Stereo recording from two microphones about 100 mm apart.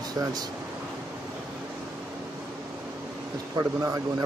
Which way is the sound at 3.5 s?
35° right (ahead or behind).